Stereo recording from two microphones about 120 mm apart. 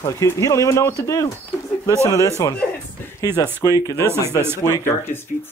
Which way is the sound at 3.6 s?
30° left (ahead or behind).